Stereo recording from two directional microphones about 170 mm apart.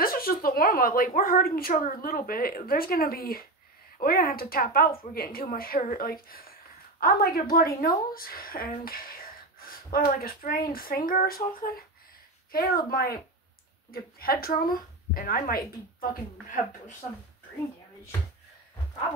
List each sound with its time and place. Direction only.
0.0 s a woman's voice: 60° left (ahead or behind)
12.4 s speech: 60° left (ahead or behind)